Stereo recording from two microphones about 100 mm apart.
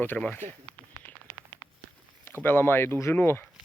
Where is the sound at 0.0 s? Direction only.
15° left (ahead or behind).